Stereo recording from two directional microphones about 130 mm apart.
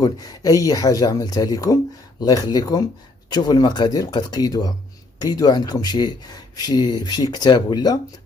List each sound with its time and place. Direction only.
0.0 s speech: 30° left (ahead or behind)